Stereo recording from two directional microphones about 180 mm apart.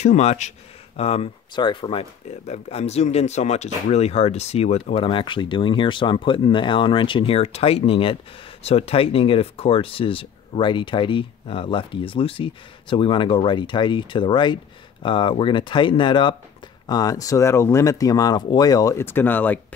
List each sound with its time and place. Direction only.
0.0 s speech: 40° left (ahead or behind); by 19.6 s 10° left (ahead or behind)